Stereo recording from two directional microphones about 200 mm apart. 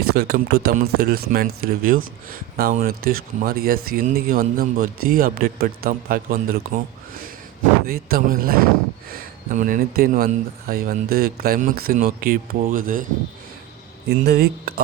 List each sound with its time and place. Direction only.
0.2 s speech: 50° right (ahead or behind)
7.9 s speech: 45° right (ahead or behind)
14.1 s speech: 55° right (ahead or behind)